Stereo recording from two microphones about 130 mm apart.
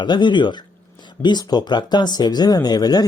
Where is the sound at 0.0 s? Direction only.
35° left (ahead or behind).